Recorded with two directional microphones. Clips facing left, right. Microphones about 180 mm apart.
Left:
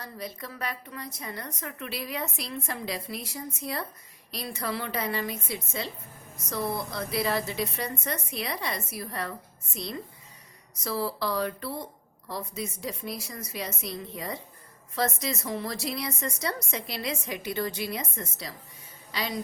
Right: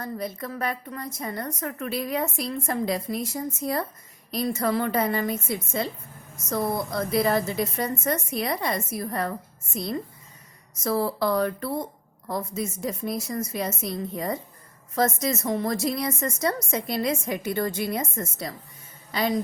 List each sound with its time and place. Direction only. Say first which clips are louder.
0.0 s a woman's voice: right 7 dB; 50° right (ahead or behind)